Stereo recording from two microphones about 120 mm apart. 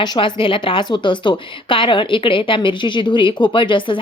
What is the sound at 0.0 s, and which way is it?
A woman's voice, 40° left (ahead or behind).